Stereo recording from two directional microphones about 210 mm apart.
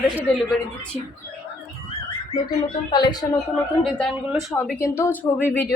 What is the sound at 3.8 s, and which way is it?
Speech, centre (ahead or behind).